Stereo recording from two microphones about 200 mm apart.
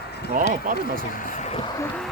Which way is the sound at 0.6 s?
45° right (ahead or behind).